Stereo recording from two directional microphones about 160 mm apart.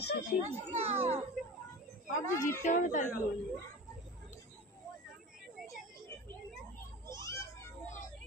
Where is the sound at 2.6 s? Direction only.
50° left (ahead or behind).